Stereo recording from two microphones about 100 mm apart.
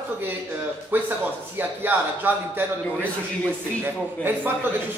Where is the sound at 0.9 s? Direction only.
20° right (ahead or behind).